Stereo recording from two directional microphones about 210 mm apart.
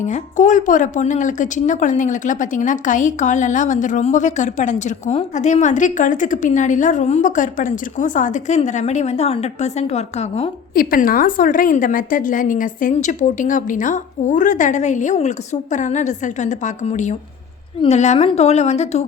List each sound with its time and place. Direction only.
0.0 s a woman's voice: 35° left (ahead or behind)
10.8 s a woman's voice: 45° left (ahead or behind)